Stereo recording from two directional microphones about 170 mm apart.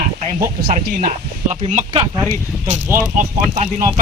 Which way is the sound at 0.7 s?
50° right (ahead or behind).